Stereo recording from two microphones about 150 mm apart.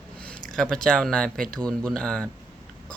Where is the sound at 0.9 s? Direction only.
5° left (ahead or behind).